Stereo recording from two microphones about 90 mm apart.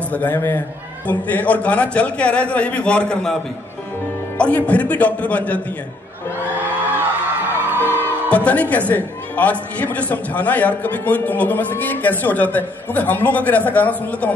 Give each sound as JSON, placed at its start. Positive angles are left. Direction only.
{"t": 0.1, "sound": "a man's voice", "side_deg": 20}
{"t": 4.4, "sound": "a man's voice", "side_deg": 15}
{"t": 7.0, "sound": "music", "side_deg": -20}
{"t": 7.8, "sound": "music", "side_deg": 25}
{"t": 8.5, "sound": "a man's voice", "side_deg": 15}